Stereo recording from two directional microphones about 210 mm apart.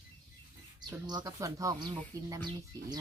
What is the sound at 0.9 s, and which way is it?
Speech, 20° right (ahead or behind).